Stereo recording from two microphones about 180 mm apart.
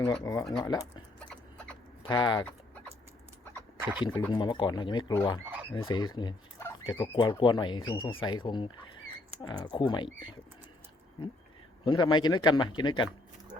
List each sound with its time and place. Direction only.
0.0 s speech: 20° left (ahead or behind)
2.0 s speech: 25° left (ahead or behind)
3.8 s a sound: 10° right (ahead or behind)
4.3 s speech: 25° left (ahead or behind)
7.2 s speech: 25° left (ahead or behind)
11.9 s speech: 25° left (ahead or behind)